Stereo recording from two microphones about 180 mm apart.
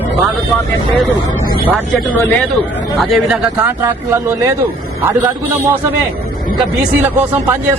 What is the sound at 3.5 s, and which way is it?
A man's voice, 15° right (ahead or behind).